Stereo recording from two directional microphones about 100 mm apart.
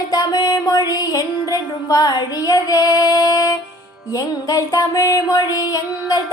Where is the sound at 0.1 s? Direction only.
40° left (ahead or behind).